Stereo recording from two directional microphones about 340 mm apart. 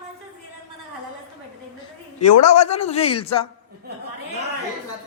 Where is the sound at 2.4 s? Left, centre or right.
Centre.